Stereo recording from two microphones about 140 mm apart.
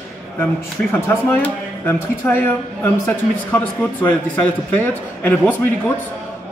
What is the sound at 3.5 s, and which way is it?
A man's voice, 10° left (ahead or behind).